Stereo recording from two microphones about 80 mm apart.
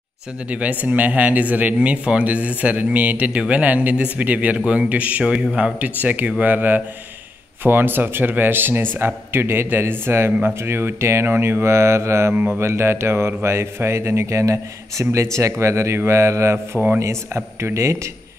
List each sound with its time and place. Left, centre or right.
0.5 s speech: centre; by 18.1 s right